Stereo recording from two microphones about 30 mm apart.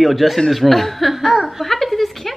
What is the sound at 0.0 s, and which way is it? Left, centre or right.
Speech, centre.